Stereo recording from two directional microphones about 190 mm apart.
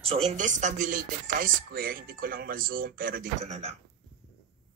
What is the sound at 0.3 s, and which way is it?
Speech, 40° right (ahead or behind).